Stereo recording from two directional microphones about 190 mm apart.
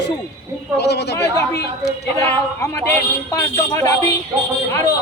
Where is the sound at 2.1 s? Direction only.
15° left (ahead or behind).